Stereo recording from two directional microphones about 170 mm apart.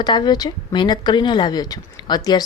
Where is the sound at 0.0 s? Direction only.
25° left (ahead or behind).